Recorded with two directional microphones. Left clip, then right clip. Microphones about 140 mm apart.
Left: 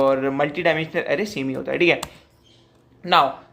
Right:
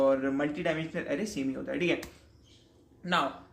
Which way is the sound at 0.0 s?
25° left (ahead or behind).